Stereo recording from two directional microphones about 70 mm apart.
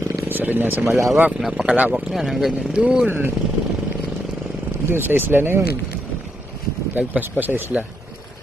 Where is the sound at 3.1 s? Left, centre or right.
Right.